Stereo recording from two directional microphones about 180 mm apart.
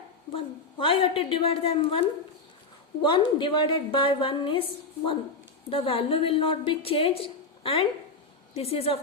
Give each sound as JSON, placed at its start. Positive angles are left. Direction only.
{"t": 0.3, "sound": "a woman's voice", "side_deg": 30}
{"t": 5.6, "sound": "a woman's voice", "side_deg": 30}